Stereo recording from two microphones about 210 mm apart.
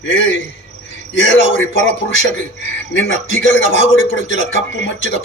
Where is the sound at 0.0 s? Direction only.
60° left (ahead or behind).